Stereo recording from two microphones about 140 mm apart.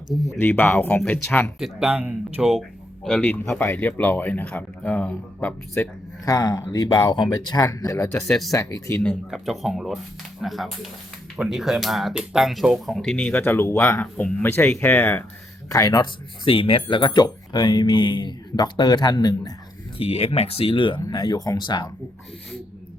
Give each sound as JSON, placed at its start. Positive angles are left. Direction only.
{"t": 0.1, "sound": "speech", "side_deg": 0}
{"t": 0.3, "sound": "speech", "side_deg": 15}
{"t": 1.5, "sound": "speech", "side_deg": -5}
{"t": 8.1, "sound": "speech", "side_deg": 5}
{"t": 8.5, "sound": "speech", "side_deg": 25}
{"t": 9.3, "sound": "speech", "side_deg": 0}
{"t": 15.7, "sound": "speech", "side_deg": 25}
{"t": 20.0, "sound": "speech", "side_deg": 45}